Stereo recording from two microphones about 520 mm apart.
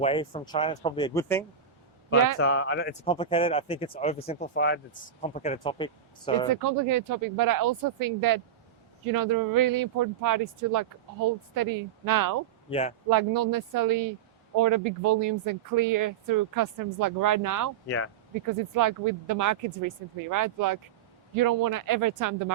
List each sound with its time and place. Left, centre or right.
0.0 s speech: centre
2.0 s speech: centre
6.5 s speech: right
12.7 s speech: centre
13.1 s speech: right
17.8 s speech: left
18.8 s speech: right